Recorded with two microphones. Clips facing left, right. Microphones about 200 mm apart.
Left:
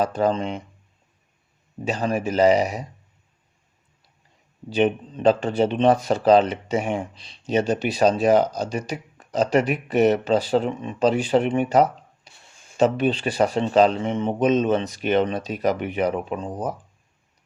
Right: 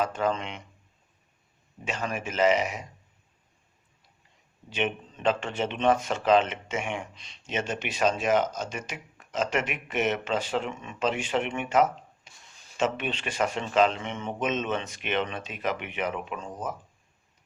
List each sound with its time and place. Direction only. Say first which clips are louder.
0.0 s speech: left 6 dB; 35° left (ahead or behind)
1.8 s speech: left 8 dB; 35° left (ahead or behind)
4.7 s speech: left 9 dB; 35° left (ahead or behind)